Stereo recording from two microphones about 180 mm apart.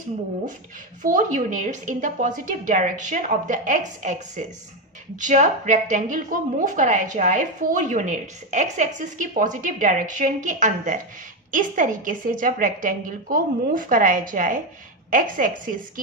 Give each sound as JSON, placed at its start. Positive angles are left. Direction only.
{"t": 1.0, "sound": "a woman's voice", "side_deg": -45}